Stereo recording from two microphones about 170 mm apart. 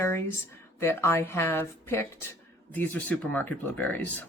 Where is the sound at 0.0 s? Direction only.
15° left (ahead or behind).